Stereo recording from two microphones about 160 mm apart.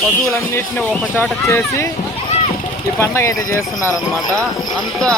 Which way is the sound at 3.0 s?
15° left (ahead or behind).